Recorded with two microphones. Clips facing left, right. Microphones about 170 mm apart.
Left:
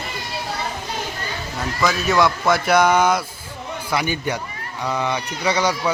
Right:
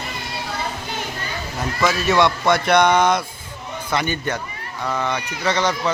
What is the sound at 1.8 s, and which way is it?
Speech, centre (ahead or behind).